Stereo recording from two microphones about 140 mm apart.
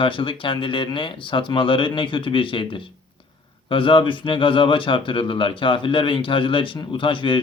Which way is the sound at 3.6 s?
35° left (ahead or behind).